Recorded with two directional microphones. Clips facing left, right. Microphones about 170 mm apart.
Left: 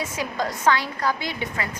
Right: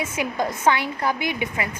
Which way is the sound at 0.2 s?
20° right (ahead or behind).